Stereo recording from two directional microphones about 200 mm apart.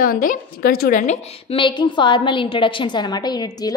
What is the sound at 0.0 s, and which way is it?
A woman's voice, 45° left (ahead or behind).